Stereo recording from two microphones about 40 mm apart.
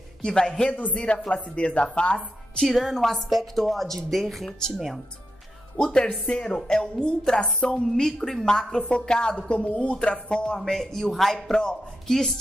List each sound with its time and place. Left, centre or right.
0.2 s speech: centre
0.7 s a man's voice: left
0.9 s a woman's voice: left
2.1 s a woman's voice: centre
4.5 s speech: centre
4.7 s a woman's voice: centre
6.2 s a woman's voice: centre
8.8 s a woman's voice: left
10.6 s speech: centre